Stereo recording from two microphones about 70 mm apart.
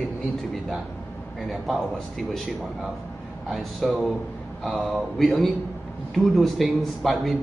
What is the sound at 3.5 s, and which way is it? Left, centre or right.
A man's voice, centre.